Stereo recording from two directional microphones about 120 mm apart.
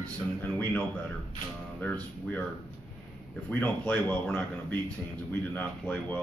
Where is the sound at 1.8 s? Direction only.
15° left (ahead or behind).